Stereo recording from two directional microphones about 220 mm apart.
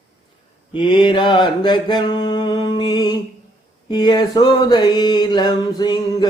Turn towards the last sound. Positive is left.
turn(degrees=20)  # may be behind; listen again after turning